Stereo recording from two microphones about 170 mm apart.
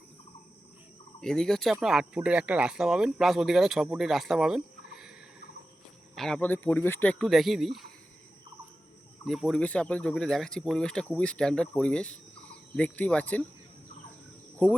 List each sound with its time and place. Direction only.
1.2 s speech: 5° left (ahead or behind)
6.1 s speech: 5° left (ahead or behind)
9.2 s speech: centre (ahead or behind)
14.6 s speech: 10° left (ahead or behind)